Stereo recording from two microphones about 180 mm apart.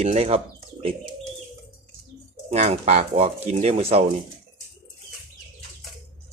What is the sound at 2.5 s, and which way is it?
Speech, 35° right (ahead or behind).